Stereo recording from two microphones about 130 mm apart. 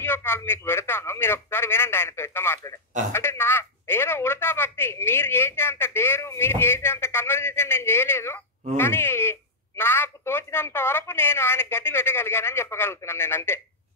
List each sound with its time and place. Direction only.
0.0 s speech: 15° left (ahead or behind)